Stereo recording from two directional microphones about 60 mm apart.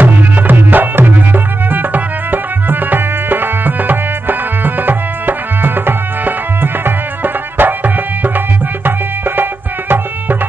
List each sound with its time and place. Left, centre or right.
0.0 s music: right